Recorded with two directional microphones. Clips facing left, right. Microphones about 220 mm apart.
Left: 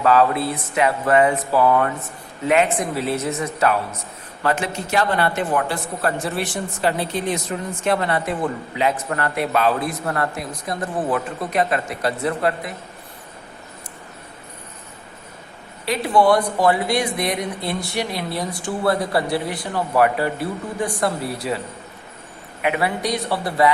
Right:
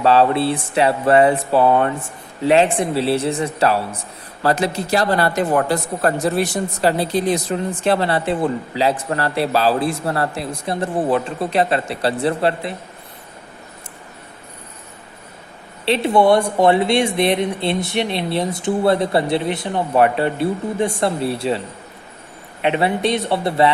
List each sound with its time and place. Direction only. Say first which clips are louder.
0.0 s speech: right 2 dB; 30° right (ahead or behind)
15.9 s speech: right 3 dB; 25° right (ahead or behind)
22.6 s speech: right 4 dB; 25° right (ahead or behind)